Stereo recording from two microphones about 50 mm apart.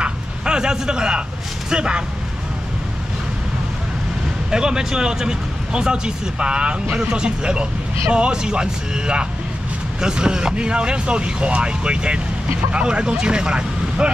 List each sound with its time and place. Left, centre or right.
0.0 s a sound: centre
1.7 s speech: centre
4.5 s speech: centre